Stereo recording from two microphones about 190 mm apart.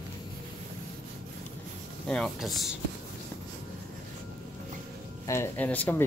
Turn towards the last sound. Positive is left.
turn(degrees=10)  # may be behind; listen again after turning